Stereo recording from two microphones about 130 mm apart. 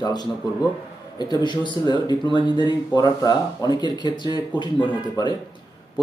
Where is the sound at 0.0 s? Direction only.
30° left (ahead or behind).